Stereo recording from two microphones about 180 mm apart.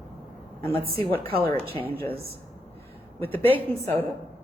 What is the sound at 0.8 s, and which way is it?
Speech, 55° right (ahead or behind).